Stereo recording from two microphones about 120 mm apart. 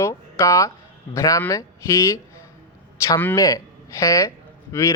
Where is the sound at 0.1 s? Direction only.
25° left (ahead or behind).